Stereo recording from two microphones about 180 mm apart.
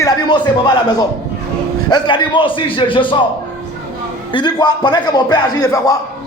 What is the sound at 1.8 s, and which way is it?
A man's voice, 25° left (ahead or behind).